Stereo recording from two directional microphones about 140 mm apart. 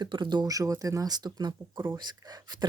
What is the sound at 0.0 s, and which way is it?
Speech, 30° right (ahead or behind).